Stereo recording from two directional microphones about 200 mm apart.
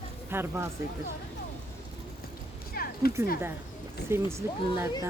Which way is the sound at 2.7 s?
50° left (ahead or behind).